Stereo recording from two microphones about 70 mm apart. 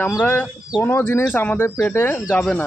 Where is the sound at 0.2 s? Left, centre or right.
Left.